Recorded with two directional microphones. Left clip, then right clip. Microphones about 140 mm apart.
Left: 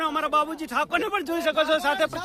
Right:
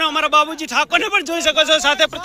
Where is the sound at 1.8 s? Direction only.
20° right (ahead or behind).